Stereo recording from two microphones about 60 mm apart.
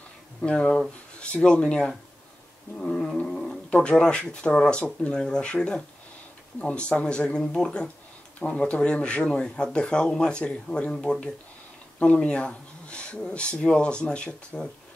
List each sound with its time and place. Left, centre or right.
0.5 s speech: centre
2.8 s cat: centre
3.8 s speech: centre